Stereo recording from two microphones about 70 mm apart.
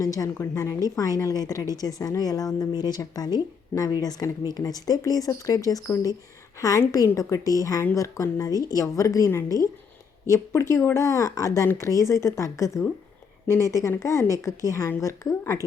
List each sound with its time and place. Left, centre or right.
0.0 s speech: left
0.9 s a woman's voice: left
10.2 s speech: left